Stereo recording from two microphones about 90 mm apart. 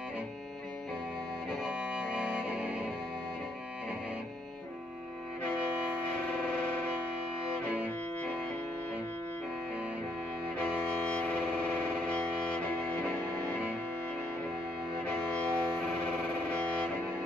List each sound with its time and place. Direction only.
1.6 s music: 10° right (ahead or behind)
6.0 s vehicle horn: 15° left (ahead or behind)
10.6 s music: 15° left (ahead or behind)
15.0 s music: 15° left (ahead or behind)